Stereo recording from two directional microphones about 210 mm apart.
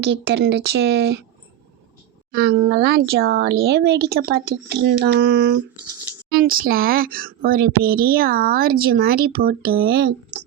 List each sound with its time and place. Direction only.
0.0 s a woman's voice: 55° right (ahead or behind)
2.3 s a woman's voice: 50° right (ahead or behind)